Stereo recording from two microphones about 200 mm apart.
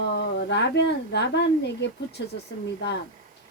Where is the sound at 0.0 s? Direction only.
55° left (ahead or behind).